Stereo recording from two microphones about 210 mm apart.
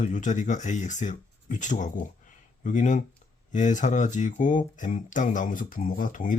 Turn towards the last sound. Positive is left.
turn(degrees=40)  # may be behind; listen again after turning